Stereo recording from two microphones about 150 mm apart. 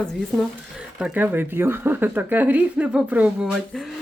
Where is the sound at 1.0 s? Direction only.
10° right (ahead or behind).